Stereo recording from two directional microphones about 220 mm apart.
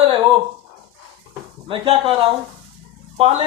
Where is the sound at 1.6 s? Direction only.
20° right (ahead or behind).